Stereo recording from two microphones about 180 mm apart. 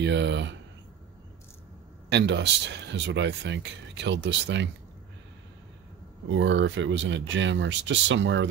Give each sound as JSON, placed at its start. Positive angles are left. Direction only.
{"t": 0.0, "sound": "speech", "side_deg": -75}
{"t": 2.0, "sound": "speech", "side_deg": -75}
{"t": 6.2, "sound": "speech", "side_deg": -90}